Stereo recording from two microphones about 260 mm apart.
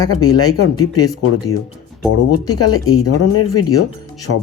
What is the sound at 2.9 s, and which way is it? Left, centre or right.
Speech, left.